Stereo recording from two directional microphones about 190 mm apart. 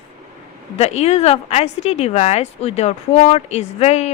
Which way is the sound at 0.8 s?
35° left (ahead or behind).